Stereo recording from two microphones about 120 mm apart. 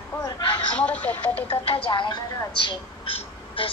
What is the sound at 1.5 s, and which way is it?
A woman's voice, 55° left (ahead or behind).